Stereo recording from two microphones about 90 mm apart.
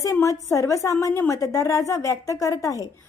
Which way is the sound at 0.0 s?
35° left (ahead or behind).